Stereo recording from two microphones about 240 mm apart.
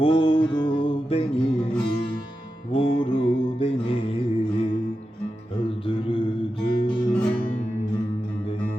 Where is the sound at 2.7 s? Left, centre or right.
Left.